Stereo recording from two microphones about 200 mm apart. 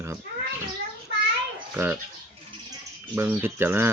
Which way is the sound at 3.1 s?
10° right (ahead or behind).